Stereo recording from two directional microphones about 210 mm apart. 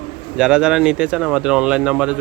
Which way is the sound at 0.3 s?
5° right (ahead or behind).